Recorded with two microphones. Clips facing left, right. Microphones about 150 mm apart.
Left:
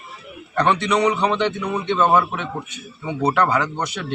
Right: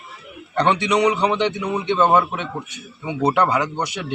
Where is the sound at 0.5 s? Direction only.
20° right (ahead or behind).